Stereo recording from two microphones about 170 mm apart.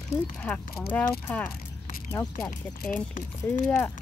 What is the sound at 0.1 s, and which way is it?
Speech, 10° left (ahead or behind).